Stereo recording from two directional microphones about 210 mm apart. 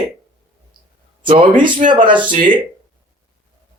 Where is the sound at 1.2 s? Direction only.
25° right (ahead or behind).